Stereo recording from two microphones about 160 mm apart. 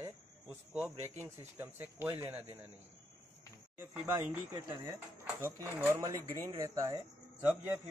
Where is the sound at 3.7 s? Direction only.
15° right (ahead or behind).